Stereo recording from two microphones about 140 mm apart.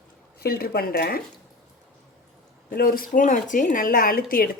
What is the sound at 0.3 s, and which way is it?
Speech, 90° left.